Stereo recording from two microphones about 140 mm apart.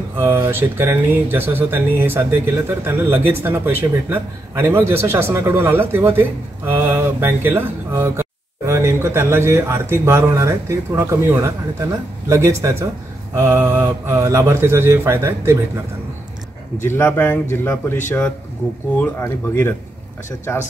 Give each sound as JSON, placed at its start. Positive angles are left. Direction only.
{"t": 0.2, "sound": "speech", "side_deg": -15}
{"t": 16.8, "sound": "a man's voice", "side_deg": 15}
{"t": 18.9, "sound": "a man's voice", "side_deg": 15}